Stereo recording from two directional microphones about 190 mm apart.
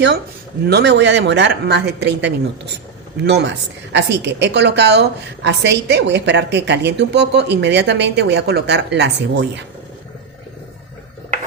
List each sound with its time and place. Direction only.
0.7 s a woman's voice: 60° right (ahead or behind)